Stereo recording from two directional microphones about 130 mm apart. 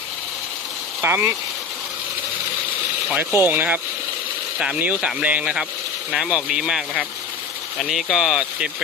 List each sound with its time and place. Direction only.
1.0 s speech: 20° right (ahead or behind)
3.1 s speech: 15° right (ahead or behind)